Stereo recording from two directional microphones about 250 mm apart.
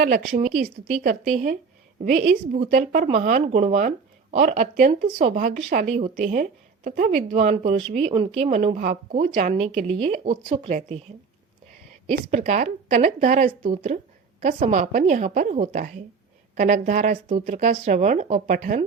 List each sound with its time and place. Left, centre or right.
0.0 s speech: right
12.3 s speech: right